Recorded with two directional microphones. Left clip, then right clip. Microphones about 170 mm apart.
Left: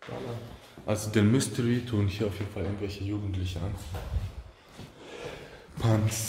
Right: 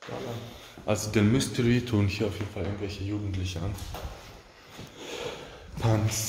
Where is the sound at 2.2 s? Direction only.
10° left (ahead or behind).